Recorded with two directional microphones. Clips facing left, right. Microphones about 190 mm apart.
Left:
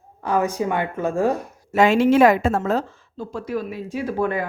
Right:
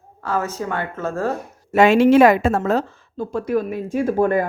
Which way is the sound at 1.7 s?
65° right (ahead or behind).